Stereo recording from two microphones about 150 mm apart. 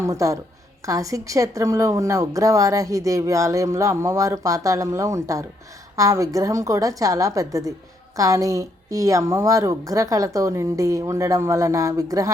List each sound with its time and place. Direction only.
0.0 s a woman's voice: 20° right (ahead or behind)